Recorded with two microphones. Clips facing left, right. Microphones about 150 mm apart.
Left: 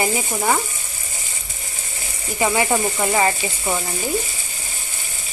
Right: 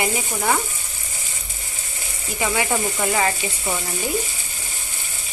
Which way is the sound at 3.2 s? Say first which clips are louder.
Left 3 dB; 15° left (ahead or behind).